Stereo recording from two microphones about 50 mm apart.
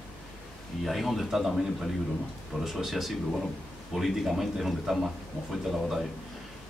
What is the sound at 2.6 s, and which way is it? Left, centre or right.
Speech, centre.